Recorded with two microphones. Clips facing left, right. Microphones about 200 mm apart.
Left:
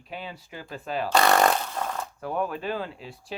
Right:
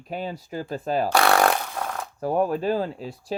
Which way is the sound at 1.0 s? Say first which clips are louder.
Even; 10° right (ahead or behind).